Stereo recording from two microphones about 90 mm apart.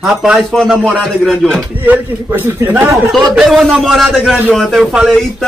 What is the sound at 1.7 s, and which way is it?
Speech, 80° right.